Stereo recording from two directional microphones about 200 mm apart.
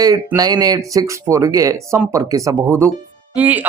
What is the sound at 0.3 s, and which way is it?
Speech, 20° right (ahead or behind).